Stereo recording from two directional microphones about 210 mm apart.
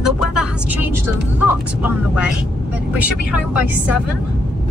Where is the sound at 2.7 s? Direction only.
5° right (ahead or behind).